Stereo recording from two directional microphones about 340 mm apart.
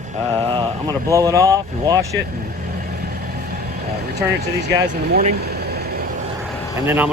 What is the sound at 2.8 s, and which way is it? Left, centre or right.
Vehicle, right.